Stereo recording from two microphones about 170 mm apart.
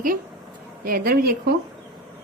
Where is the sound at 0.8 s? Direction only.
60° right (ahead or behind).